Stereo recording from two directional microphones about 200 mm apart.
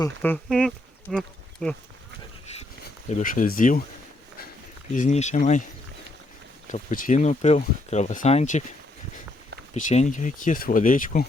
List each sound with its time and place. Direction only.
0.2 s speech: 5° left (ahead or behind)
3.1 s speech: 40° left (ahead or behind)
4.9 s speech: 35° left (ahead or behind)
6.7 s speech: 40° left (ahead or behind)
9.7 s speech: 35° left (ahead or behind)